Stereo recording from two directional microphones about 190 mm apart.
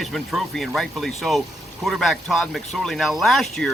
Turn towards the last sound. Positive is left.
turn(degrees=0)  # may be behind; listen again after turning